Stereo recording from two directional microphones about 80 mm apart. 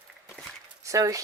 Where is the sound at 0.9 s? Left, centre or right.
Right.